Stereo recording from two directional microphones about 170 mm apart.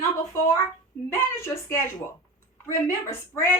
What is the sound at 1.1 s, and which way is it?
A woman's voice, 15° left (ahead or behind).